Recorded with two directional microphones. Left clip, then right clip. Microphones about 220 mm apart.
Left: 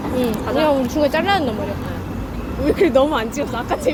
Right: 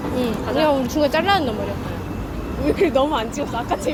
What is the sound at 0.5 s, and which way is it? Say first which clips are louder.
Speech: left 1 dB; centre (ahead or behind).